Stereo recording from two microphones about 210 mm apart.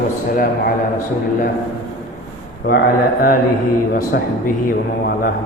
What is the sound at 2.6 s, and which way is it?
A man's voice, 45° left (ahead or behind).